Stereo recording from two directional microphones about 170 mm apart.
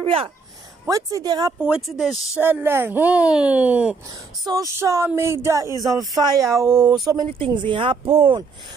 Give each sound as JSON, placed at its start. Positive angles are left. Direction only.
{"t": 0.0, "sound": "speech", "side_deg": -35}
{"t": 0.8, "sound": "speech", "side_deg": -20}
{"t": 1.6, "sound": "speech", "side_deg": -5}
{"t": 2.4, "sound": "speech", "side_deg": -15}